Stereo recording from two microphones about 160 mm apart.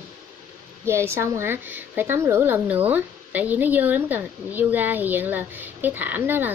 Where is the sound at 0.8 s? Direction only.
15° right (ahead or behind).